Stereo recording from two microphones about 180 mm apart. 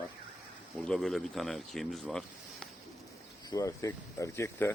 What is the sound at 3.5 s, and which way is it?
Speech, 20° left (ahead or behind).